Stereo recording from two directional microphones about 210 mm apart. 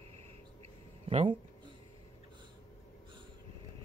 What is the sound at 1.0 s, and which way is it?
Speech, 25° right (ahead or behind).